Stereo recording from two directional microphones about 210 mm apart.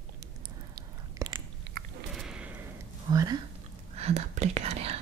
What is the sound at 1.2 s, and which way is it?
Biting, 15° right (ahead or behind).